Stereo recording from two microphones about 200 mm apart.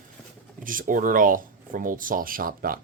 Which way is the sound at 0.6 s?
45° right (ahead or behind).